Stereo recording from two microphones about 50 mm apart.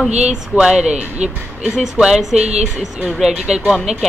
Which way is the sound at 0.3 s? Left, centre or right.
Centre.